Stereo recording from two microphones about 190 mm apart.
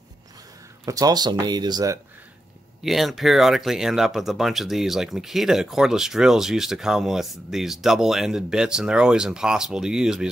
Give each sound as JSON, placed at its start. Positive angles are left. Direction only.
{"t": 0.8, "sound": "speech", "side_deg": -20}
{"t": 2.8, "sound": "speech", "side_deg": 0}